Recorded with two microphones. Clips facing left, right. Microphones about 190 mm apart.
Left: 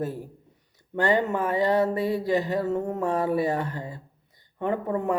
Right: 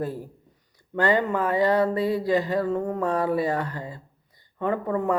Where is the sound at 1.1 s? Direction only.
20° left (ahead or behind).